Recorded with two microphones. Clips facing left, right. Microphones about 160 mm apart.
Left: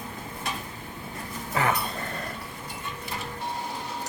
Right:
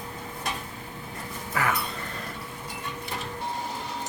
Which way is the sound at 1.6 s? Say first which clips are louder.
Left 2 dB; 25° left (ahead or behind).